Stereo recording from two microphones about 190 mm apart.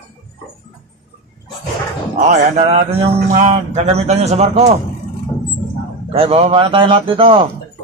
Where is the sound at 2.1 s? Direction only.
40° right (ahead or behind).